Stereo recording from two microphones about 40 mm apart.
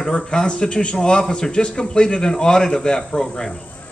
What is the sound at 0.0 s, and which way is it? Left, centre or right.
A man's voice, centre.